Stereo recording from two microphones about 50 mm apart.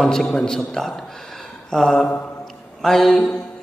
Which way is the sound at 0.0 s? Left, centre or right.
Centre.